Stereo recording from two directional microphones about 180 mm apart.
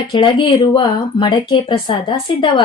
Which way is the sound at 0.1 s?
25° left (ahead or behind).